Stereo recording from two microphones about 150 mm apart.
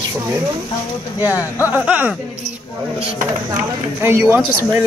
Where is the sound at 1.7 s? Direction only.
10° right (ahead or behind).